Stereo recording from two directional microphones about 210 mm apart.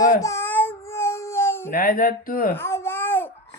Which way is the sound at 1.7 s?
45° left (ahead or behind).